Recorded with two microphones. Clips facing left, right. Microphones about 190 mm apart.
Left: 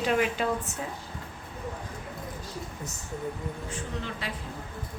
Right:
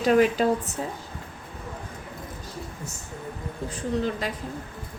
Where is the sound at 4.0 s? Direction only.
40° right (ahead or behind).